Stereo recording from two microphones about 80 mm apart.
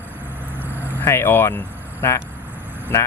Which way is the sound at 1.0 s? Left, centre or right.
Left.